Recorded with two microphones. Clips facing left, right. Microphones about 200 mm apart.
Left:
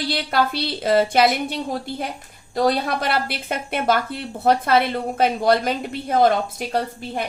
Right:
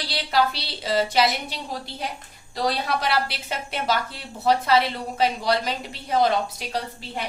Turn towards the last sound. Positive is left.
turn(degrees=50)  # may be behind; listen again after turning